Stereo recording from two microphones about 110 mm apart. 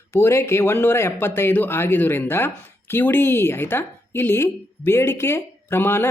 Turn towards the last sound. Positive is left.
turn(degrees=20)  # may be behind; listen again after turning